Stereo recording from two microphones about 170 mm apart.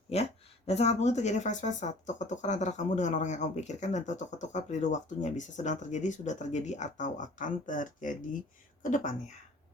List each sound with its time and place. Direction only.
0.7 s speech: 40° left (ahead or behind)